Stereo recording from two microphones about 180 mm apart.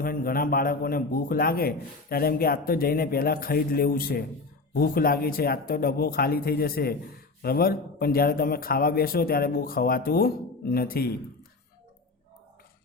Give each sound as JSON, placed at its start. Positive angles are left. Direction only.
{"t": 0.0, "sound": "a man's voice", "side_deg": 55}